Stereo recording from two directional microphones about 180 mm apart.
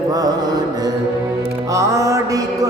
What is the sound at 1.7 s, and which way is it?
Music, 15° right (ahead or behind).